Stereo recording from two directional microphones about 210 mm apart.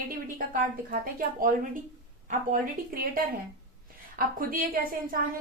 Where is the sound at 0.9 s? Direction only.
40° right (ahead or behind).